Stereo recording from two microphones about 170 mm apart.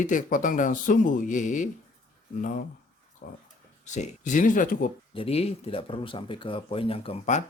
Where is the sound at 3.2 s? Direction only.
55° left (ahead or behind).